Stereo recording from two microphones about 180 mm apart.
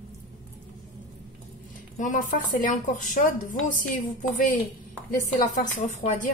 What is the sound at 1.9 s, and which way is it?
Speech, 45° left (ahead or behind).